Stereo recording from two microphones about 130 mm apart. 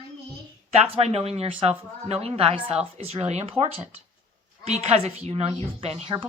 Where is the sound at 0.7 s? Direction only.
55° right (ahead or behind).